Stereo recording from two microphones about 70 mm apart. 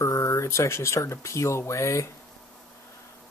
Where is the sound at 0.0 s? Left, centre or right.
Left.